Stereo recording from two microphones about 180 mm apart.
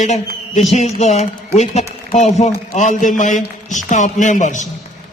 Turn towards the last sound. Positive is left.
turn(degrees=45)  # may be behind; listen again after turning